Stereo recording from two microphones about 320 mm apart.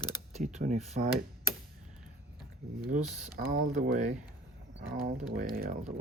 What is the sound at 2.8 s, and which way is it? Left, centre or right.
Speech, right.